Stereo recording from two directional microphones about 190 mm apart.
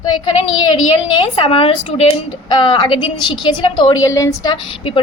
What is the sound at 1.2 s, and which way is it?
A woman's voice, 30° left (ahead or behind).